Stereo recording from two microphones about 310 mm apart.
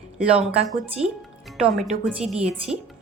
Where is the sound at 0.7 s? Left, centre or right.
Centre.